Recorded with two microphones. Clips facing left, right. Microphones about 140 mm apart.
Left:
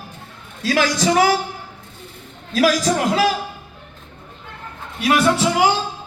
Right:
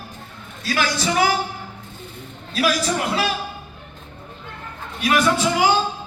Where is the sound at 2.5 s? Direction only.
90° left.